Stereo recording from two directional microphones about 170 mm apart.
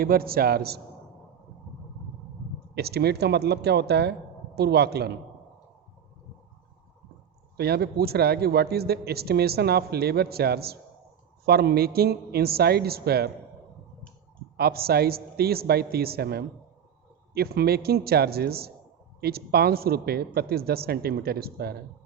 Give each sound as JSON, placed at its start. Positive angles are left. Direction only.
{"t": 0.0, "sound": "a man's voice", "side_deg": -60}
{"t": 2.7, "sound": "a man's voice", "side_deg": -70}
{"t": 7.5, "sound": "a man's voice", "side_deg": -70}
{"t": 14.5, "sound": "a man's voice", "side_deg": -65}